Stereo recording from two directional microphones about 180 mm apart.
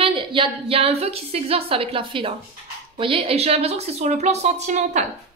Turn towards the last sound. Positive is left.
turn(degrees=-40)  # may be behind; listen again after turning